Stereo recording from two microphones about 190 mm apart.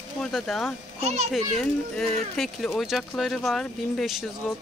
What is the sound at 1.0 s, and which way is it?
Speech, 35° right (ahead or behind).